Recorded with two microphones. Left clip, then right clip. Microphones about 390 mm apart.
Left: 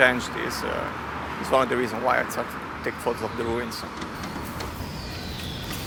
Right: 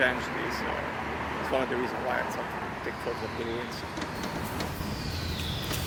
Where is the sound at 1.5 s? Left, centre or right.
Left.